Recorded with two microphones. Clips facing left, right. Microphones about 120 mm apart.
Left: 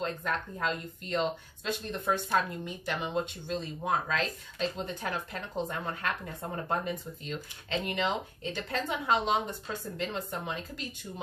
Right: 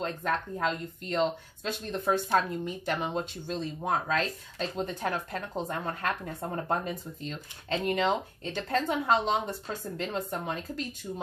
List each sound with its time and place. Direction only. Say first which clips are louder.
0.2 s speech: right 3 dB; 40° right (ahead or behind)